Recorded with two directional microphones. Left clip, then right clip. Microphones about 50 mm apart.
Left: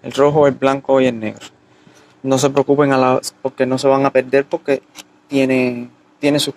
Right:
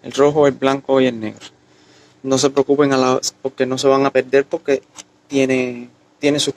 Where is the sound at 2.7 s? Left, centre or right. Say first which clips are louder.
Left 3 dB; centre; by 5.8 s right.